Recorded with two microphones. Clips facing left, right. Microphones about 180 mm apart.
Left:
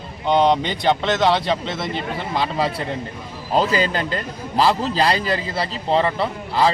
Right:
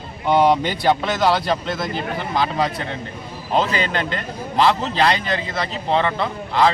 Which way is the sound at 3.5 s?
35° left (ahead or behind).